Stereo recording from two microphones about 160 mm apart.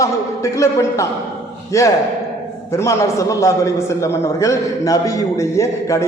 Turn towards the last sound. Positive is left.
turn(degrees=20)  # may be behind; listen again after turning